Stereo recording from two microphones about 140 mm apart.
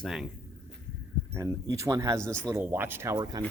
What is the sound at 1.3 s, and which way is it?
Speech, 20° right (ahead or behind).